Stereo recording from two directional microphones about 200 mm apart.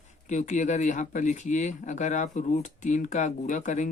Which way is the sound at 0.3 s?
40° left (ahead or behind).